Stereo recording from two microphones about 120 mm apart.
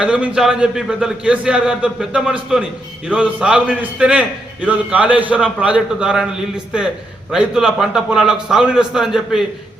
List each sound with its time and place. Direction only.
0.0 s a man's voice: 10° right (ahead or behind)